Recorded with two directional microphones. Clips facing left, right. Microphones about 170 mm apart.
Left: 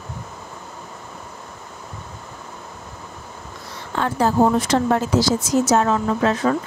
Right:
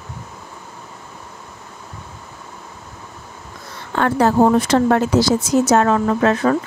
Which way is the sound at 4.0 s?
65° right (ahead or behind).